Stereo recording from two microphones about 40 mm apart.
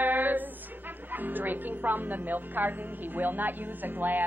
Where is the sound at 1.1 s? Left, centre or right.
Right.